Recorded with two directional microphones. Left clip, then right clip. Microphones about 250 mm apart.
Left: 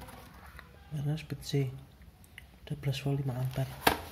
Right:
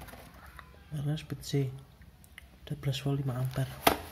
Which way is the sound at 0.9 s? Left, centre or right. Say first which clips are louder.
Right 1 dB; centre.